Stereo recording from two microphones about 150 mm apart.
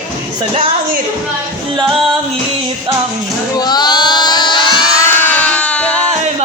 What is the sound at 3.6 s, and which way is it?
Music, 30° left (ahead or behind).